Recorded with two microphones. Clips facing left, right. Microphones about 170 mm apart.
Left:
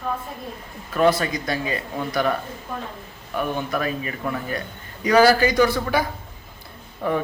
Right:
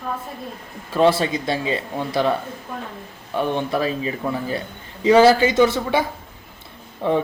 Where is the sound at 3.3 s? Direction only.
30° right (ahead or behind).